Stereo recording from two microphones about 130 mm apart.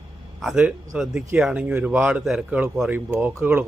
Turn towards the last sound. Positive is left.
turn(degrees=-20)  # may be behind; listen again after turning